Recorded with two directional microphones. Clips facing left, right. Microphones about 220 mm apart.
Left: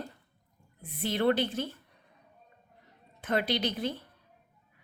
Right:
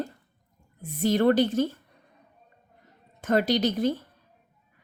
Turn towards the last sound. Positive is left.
turn(degrees=-45)  # may be behind; listen again after turning